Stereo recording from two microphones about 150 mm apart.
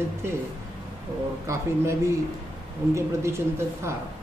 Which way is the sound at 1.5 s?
20° right (ahead or behind).